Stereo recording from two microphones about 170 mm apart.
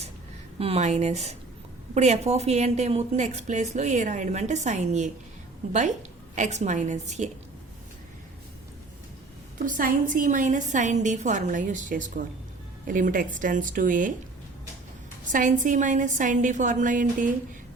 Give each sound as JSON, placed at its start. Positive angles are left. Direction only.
{"t": 0.6, "sound": "a woman's voice", "side_deg": -40}
{"t": 6.3, "sound": "a woman's voice", "side_deg": -45}
{"t": 9.6, "sound": "a woman's voice", "side_deg": -50}
{"t": 15.3, "sound": "a woman's voice", "side_deg": -50}